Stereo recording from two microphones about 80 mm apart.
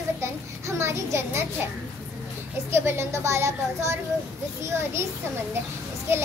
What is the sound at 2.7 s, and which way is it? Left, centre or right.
A child's voice, right.